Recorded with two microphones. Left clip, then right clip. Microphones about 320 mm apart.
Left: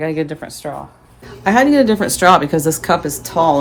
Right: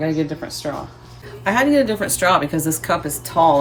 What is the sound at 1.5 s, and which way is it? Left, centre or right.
A woman's voice, centre.